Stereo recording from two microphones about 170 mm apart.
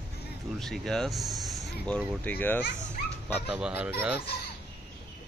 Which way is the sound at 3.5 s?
5° right (ahead or behind).